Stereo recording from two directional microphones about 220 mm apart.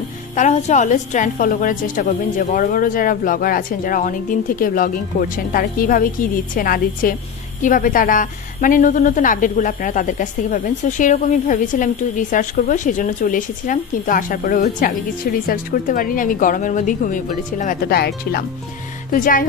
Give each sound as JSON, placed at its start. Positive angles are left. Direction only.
{"t": 0.4, "sound": "a woman's voice", "side_deg": 30}